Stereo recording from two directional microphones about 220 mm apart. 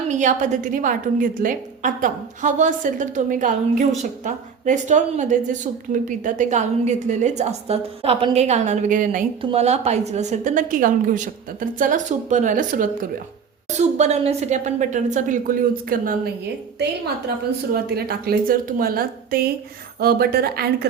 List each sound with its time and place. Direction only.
0.1 s a woman's voice: 35° right (ahead or behind)
17.7 s a woman's voice: 45° right (ahead or behind)